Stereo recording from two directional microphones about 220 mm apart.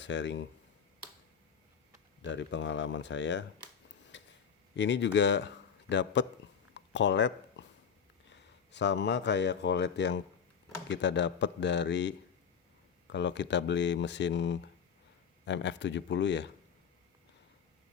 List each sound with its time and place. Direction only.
0.0 s speech: 55° left (ahead or behind)
2.2 s speech: 55° left (ahead or behind)
4.1 s a sound: 55° left (ahead or behind)
4.8 s speech: 55° left (ahead or behind)